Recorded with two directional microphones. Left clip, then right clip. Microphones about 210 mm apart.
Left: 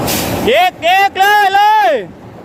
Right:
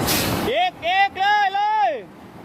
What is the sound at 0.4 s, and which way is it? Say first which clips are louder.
Artillery fire: left 14 dB; 40° left (ahead or behind).